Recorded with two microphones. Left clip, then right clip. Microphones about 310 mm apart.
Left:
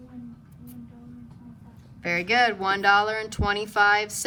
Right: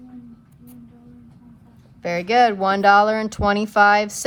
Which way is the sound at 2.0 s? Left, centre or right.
Centre.